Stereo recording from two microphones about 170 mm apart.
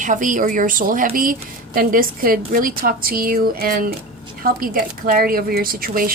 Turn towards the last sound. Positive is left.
turn(degrees=-60)  # may be behind; listen again after turning